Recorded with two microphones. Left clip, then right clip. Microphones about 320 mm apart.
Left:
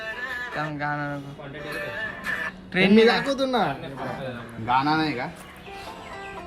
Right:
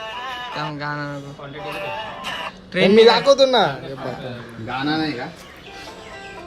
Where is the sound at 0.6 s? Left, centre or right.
Centre.